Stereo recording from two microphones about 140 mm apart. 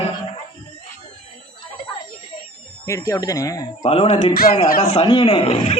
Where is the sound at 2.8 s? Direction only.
20° left (ahead or behind).